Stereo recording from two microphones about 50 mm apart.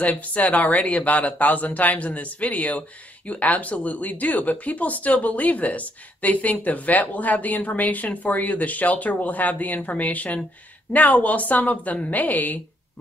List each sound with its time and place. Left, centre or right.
0.0 s speech: left